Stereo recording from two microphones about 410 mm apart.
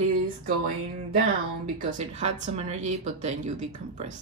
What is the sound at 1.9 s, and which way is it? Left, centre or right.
Speech, centre.